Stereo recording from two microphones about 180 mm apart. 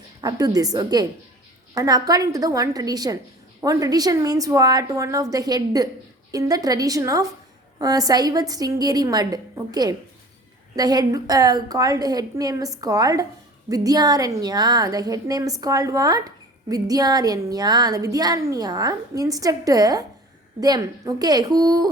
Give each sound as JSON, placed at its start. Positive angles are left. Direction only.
{"t": 0.2, "sound": "a woman's voice", "side_deg": -20}